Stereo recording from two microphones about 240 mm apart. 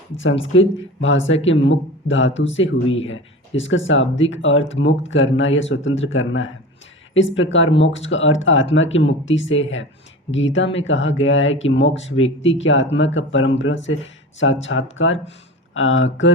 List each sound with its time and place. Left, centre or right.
0.5 s speech: left